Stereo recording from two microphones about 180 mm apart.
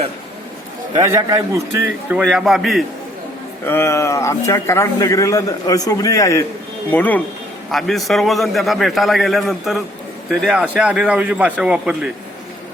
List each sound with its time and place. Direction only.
0.9 s a man's voice: 20° right (ahead or behind)
2.1 s a man's voice: centre (ahead or behind)
3.7 s a man's voice: 15° left (ahead or behind); by 12.1 s 5° right (ahead or behind)